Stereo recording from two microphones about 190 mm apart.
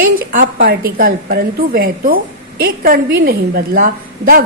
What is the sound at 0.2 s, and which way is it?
A woman's voice, 45° right (ahead or behind).